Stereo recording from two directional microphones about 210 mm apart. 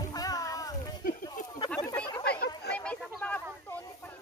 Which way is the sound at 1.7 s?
5° left (ahead or behind).